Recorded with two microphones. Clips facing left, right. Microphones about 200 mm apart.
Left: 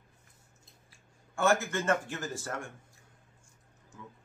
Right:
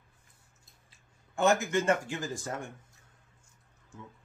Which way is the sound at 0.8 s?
20° right (ahead or behind).